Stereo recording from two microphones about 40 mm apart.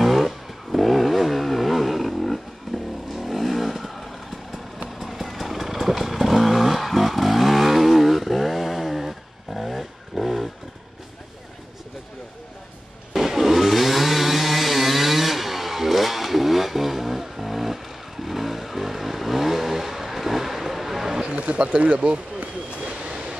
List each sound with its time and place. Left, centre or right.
0.0 s vehicle: centre
13.1 s chainsaw: centre
21.2 s a sound: right